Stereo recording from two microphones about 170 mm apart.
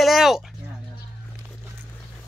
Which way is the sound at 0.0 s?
Centre (ahead or behind).